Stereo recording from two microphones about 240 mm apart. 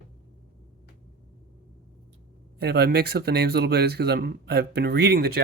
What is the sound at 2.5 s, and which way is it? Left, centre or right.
Speech, right.